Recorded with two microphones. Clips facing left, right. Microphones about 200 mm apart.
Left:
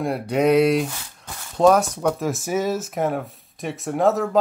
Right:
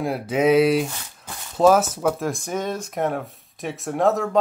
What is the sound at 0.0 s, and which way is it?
Speech, centre (ahead or behind).